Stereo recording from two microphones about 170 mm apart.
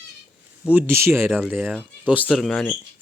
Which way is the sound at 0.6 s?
10° right (ahead or behind).